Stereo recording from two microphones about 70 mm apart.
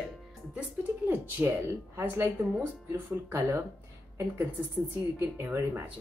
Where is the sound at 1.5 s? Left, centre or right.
Right.